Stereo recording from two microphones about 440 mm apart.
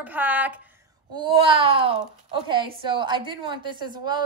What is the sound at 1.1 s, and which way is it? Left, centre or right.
A woman's voice, centre.